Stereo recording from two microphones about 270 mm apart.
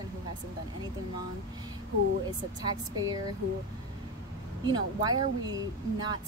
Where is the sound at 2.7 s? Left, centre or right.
Centre.